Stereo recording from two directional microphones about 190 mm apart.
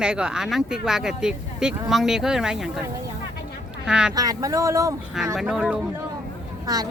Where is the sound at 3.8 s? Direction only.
5° right (ahead or behind).